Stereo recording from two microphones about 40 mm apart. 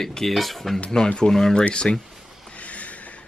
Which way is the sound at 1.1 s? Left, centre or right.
Centre.